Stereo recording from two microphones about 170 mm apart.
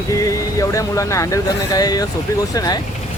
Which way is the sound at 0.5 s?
20° left (ahead or behind).